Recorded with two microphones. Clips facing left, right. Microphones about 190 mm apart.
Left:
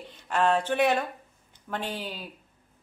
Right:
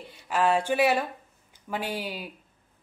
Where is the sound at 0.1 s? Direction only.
5° right (ahead or behind).